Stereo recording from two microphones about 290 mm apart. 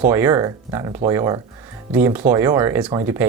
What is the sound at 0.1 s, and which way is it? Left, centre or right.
Speech, centre.